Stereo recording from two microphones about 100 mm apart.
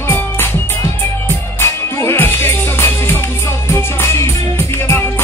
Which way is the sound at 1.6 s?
25° left (ahead or behind).